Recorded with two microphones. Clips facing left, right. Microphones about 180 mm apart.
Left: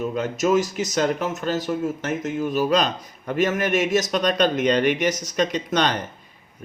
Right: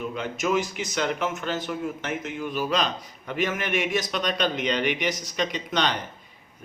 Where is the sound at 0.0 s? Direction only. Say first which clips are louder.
Left 6 dB; 40° left (ahead or behind).